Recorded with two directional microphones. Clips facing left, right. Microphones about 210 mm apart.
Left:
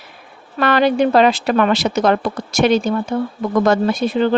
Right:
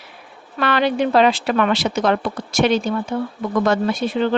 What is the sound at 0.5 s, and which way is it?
Speech, 45° left (ahead or behind).